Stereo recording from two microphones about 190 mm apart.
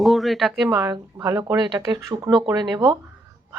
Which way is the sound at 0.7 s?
20° right (ahead or behind).